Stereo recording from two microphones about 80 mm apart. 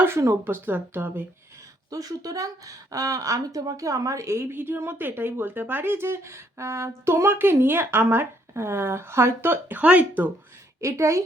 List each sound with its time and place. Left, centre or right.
0.0 s speech: right
1.9 s speech: right; by 10.2 s centre
10.8 s speech: right